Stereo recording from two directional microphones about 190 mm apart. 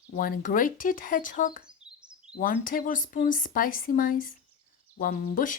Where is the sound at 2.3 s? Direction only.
50° left (ahead or behind).